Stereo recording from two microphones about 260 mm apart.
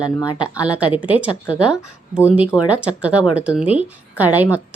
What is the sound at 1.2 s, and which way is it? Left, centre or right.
Speech, centre.